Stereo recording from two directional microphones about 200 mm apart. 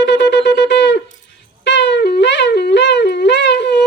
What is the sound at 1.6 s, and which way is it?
Wind instrument, 60° left (ahead or behind).